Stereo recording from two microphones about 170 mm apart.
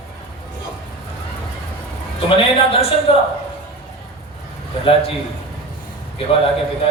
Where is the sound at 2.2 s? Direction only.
35° left (ahead or behind).